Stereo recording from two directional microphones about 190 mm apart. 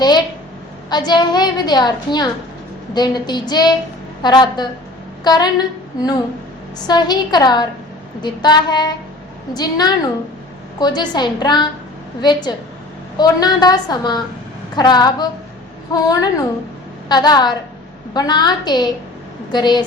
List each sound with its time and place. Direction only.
0.9 s a woman's voice: 20° left (ahead or behind)
6.8 s a woman's voice: 20° left (ahead or behind)